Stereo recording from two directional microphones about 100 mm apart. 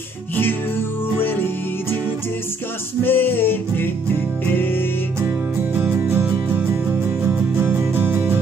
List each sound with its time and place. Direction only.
3.0 s music: 20° left (ahead or behind)
5.8 s music: 20° right (ahead or behind)